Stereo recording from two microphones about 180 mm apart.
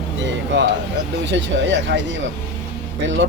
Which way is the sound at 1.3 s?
85° right.